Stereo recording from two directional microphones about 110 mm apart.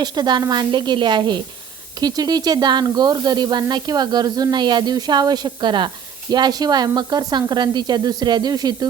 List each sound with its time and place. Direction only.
0.0 s speech: 40° right (ahead or behind)
2.0 s sizzle: 35° right (ahead or behind)